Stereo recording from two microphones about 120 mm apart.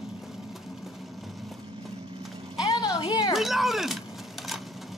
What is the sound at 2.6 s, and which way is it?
Vehicle, 35° left (ahead or behind).